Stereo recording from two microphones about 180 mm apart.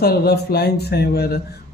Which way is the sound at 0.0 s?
60° left (ahead or behind).